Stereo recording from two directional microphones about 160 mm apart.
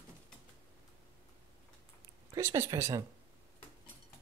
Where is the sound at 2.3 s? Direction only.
15° right (ahead or behind).